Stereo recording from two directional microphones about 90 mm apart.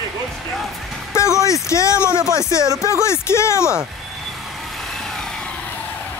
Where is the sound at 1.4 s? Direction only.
35° left (ahead or behind).